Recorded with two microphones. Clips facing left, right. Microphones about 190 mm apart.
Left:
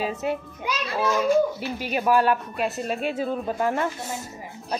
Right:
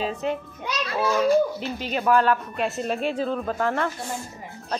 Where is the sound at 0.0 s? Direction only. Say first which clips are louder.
Even; 5° left (ahead or behind).